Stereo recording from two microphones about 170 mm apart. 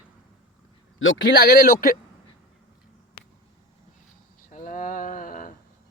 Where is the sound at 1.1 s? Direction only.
90° left.